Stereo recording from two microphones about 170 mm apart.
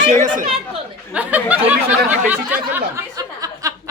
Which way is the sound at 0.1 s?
45° right (ahead or behind).